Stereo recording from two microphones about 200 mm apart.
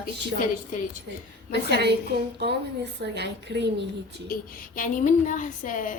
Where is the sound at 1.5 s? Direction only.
55° right (ahead or behind).